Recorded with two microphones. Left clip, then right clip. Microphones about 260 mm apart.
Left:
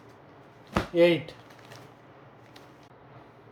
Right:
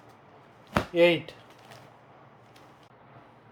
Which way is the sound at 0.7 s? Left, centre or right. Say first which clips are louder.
Even; centre.